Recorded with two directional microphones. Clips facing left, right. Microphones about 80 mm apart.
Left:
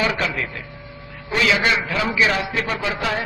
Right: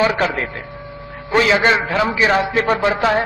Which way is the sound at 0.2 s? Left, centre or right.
Right.